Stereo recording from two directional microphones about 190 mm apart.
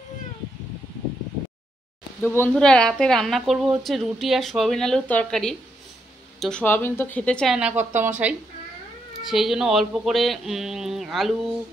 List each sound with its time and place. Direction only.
2.2 s speech: 10° left (ahead or behind); by 8.1 s 10° right (ahead or behind)
9.1 s speech: centre (ahead or behind)